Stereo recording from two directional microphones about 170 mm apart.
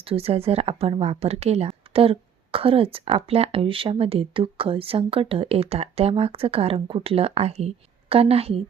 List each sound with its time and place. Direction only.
0.0 s a woman's voice: 35° right (ahead or behind)